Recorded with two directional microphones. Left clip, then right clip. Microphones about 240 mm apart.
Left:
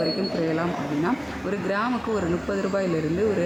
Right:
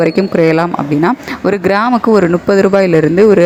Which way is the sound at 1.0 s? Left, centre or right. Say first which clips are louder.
Right 13 dB; right.